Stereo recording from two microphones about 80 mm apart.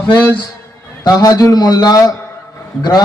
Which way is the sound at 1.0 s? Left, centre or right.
Left.